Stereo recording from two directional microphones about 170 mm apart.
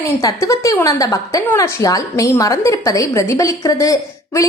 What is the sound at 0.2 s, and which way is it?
A woman's voice, 20° left (ahead or behind).